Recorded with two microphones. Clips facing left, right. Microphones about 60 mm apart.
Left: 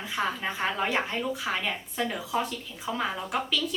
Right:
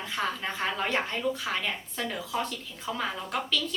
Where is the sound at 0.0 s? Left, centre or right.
Centre.